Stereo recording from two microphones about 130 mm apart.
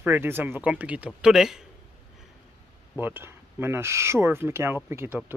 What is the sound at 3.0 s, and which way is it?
Speech, 15° right (ahead or behind).